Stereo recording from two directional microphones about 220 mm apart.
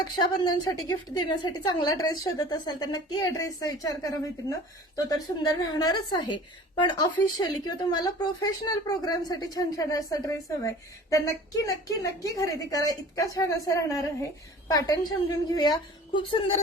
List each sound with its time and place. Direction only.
0.0 s a woman's voice: 20° left (ahead or behind)